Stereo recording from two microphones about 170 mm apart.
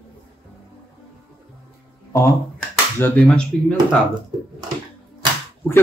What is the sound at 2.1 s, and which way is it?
A man's voice, 15° left (ahead or behind).